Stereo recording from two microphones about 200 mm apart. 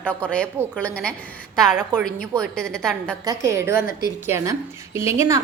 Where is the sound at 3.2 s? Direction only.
15° right (ahead or behind).